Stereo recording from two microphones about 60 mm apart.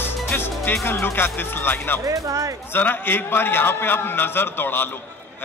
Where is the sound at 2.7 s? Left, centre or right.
Left.